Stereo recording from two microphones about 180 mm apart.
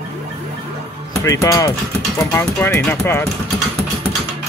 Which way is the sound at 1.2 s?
20° left (ahead or behind).